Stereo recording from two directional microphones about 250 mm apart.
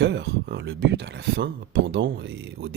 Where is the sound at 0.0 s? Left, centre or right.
Right.